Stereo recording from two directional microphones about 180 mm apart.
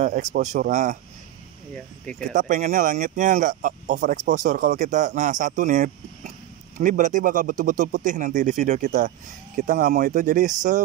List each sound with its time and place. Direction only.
0.0 s speech: 45° right (ahead or behind)
2.1 s speech: 45° right (ahead or behind)